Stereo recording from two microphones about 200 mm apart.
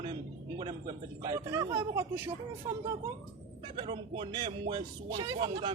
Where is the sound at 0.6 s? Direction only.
20° right (ahead or behind).